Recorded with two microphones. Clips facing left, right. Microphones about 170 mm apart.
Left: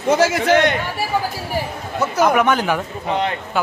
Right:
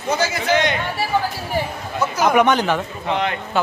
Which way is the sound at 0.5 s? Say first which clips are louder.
Left 2 dB; 60° left (ahead or behind).